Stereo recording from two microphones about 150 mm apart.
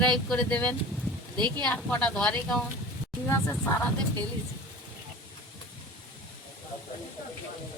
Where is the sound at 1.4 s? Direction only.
30° right (ahead or behind).